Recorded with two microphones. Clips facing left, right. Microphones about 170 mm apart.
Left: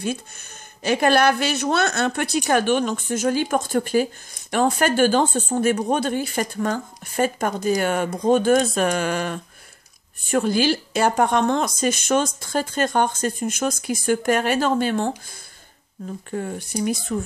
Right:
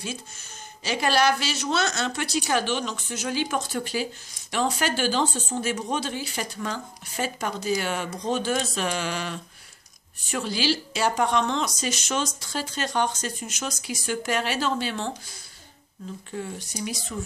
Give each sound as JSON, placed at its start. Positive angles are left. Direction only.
{"t": 0.8, "sound": "a woman's voice", "side_deg": 55}
{"t": 16.3, "sound": "a woman's voice", "side_deg": 50}